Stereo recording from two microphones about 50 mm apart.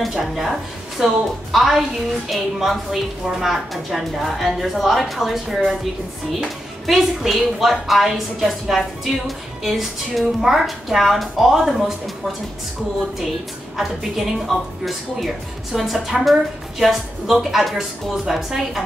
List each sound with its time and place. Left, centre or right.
0.2 s a woman's voice: centre
13.7 s a woman's voice: centre